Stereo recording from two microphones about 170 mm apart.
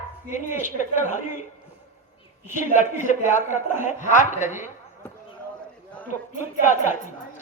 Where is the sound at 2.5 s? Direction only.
45° left (ahead or behind).